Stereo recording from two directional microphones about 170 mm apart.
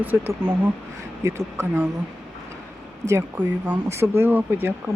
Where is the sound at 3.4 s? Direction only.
10° right (ahead or behind).